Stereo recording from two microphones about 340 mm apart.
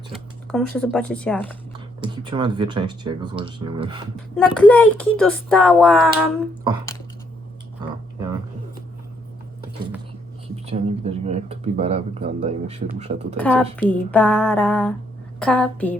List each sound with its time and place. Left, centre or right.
0.1 s speech: centre
2.0 s speech: centre
4.4 s speech: centre
7.8 s a sound: centre
10.5 s speech: centre
13.3 s speech: centre